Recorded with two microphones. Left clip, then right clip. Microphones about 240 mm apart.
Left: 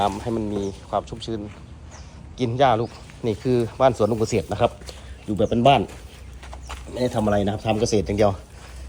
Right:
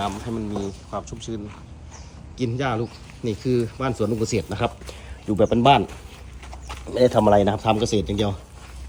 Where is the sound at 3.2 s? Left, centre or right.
Centre.